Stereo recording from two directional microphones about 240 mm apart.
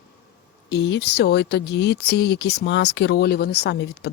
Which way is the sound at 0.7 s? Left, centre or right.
Left.